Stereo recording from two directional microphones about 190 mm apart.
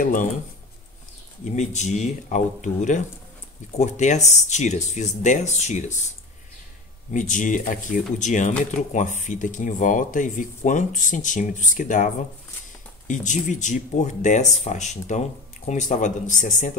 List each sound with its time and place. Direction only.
0.0 s speech: 45° left (ahead or behind)
1.4 s speech: 40° left (ahead or behind)
7.1 s speech: 40° left (ahead or behind)